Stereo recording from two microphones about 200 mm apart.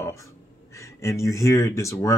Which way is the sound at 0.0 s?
15° left (ahead or behind).